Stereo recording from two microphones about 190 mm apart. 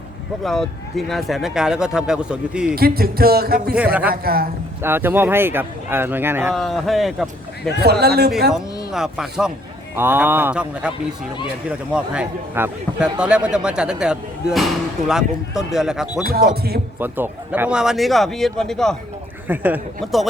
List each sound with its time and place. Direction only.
0.4 s a man's voice: centre (ahead or behind)
2.6 s speech: 50° right (ahead or behind)
4.8 s speech: 10° right (ahead or behind)
6.5 s a man's voice: centre (ahead or behind)
7.8 s a man's voice: 60° right (ahead or behind)
8.9 s a man's voice: 5° right (ahead or behind)
19.5 s speech: 10° right (ahead or behind)